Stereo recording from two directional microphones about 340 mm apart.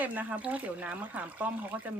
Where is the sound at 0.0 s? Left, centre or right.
Centre.